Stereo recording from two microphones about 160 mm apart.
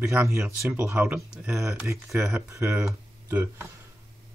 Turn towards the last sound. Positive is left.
turn(degrees=-15)  # may be behind; listen again after turning